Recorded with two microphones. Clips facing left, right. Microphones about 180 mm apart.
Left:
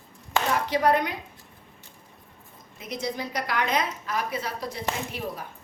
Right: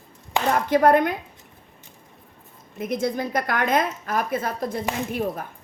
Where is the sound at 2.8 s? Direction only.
50° right (ahead or behind).